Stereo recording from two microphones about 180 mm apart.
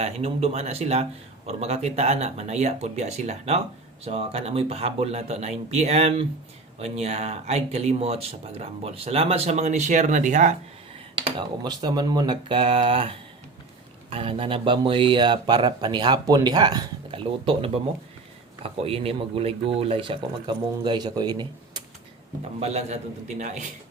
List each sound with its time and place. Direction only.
0.0 s speech: 35° right (ahead or behind)
11.2 s speech: 25° right (ahead or behind)
22.6 s speech: 35° right (ahead or behind)